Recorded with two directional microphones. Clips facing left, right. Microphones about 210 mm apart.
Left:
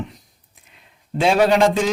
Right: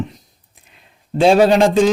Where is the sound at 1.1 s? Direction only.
30° right (ahead or behind).